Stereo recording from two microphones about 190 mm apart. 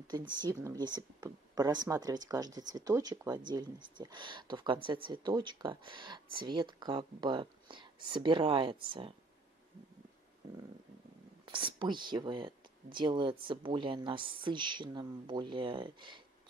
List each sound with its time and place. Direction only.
0.1 s speech: 25° right (ahead or behind)
11.4 s speech: 25° right (ahead or behind)